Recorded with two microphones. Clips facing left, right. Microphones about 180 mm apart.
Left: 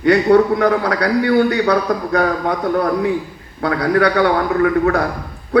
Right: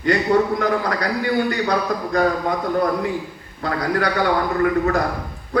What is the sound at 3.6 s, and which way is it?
A man's voice, 65° left (ahead or behind).